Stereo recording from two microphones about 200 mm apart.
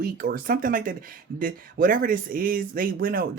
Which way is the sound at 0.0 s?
45° right (ahead or behind).